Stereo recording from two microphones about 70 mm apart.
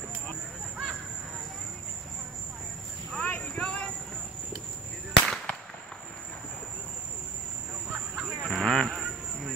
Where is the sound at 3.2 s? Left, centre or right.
Centre.